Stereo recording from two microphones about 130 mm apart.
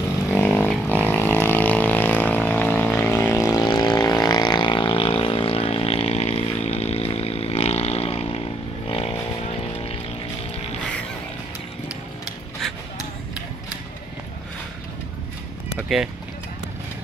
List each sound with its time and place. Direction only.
0.4 s vehicle: 15° left (ahead or behind)
3.4 s vehicle: 30° left (ahead or behind); by 9.9 s 50° left (ahead or behind)